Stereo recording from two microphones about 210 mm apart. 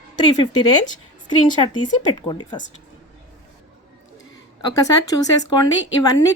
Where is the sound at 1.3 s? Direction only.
20° left (ahead or behind).